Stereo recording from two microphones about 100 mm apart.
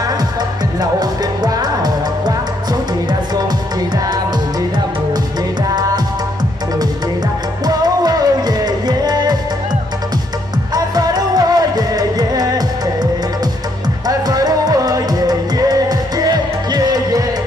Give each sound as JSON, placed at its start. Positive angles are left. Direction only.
{"t": 0.7, "sound": "music", "side_deg": -40}
{"t": 7.6, "sound": "music", "side_deg": -40}
{"t": 10.7, "sound": "music", "side_deg": -40}
{"t": 14.0, "sound": "music", "side_deg": -40}